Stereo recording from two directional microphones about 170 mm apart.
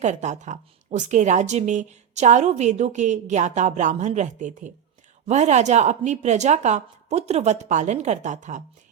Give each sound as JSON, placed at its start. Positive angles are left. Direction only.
{"t": 0.0, "sound": "a woman's voice", "side_deg": -45}